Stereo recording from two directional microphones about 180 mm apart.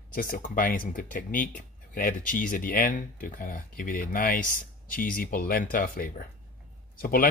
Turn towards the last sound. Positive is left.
turn(degrees=55)  # may be behind; listen again after turning